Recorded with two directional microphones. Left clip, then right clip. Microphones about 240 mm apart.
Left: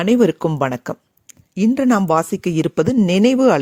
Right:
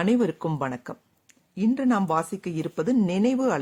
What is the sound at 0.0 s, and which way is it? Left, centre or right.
Speech, left.